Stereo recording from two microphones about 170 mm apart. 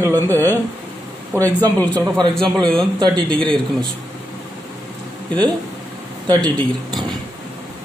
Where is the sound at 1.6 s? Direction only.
10° left (ahead or behind).